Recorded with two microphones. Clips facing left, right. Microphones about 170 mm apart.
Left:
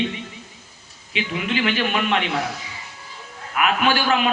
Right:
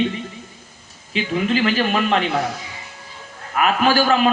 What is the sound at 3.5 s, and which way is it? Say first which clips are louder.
Speech: right 3 dB; 40° right (ahead or behind).